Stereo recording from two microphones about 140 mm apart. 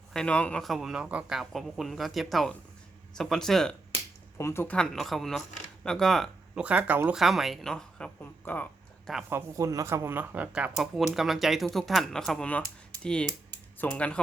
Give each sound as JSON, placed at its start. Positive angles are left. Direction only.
{"t": 0.1, "sound": "speech", "side_deg": 5}
{"t": 4.4, "sound": "speech", "side_deg": 20}
{"t": 4.8, "sound": "speech", "side_deg": 0}
{"t": 6.6, "sound": "speech", "side_deg": -10}
{"t": 9.3, "sound": "speech", "side_deg": -25}